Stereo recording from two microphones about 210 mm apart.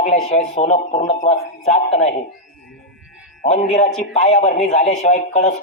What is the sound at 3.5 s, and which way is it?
A man's voice, 35° left (ahead or behind).